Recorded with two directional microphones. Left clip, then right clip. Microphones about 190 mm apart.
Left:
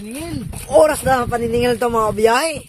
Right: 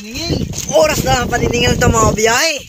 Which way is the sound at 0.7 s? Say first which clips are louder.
Even; 30° left (ahead or behind).